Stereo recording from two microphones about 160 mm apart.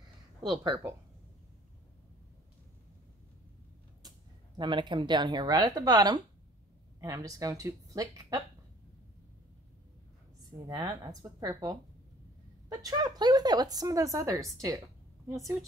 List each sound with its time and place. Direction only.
4.6 s speech: 30° right (ahead or behind)
10.7 s speech: 25° right (ahead or behind)